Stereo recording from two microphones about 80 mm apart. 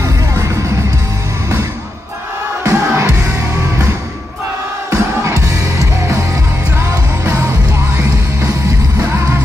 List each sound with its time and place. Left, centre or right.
0.0 s music: right
2.6 s music: right
4.9 s music: right
6.8 s music: right